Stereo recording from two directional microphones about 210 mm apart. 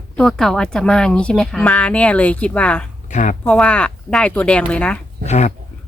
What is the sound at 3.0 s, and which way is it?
Speech, 35° left (ahead or behind).